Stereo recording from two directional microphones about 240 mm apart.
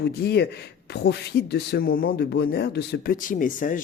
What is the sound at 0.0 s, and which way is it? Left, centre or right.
Speech, left.